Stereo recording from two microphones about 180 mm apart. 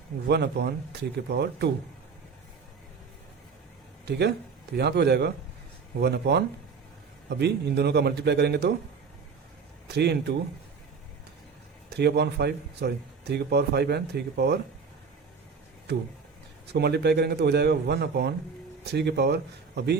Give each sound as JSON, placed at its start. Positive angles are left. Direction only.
{"t": 0.3, "sound": "a man's voice", "side_deg": -65}
{"t": 4.0, "sound": "a man's voice", "side_deg": -70}
{"t": 9.9, "sound": "a man's voice", "side_deg": -65}
{"t": 11.9, "sound": "speech", "side_deg": -65}
{"t": 16.7, "sound": "a man's voice", "side_deg": -65}